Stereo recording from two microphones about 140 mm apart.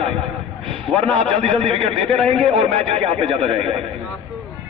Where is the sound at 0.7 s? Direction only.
40° right (ahead or behind).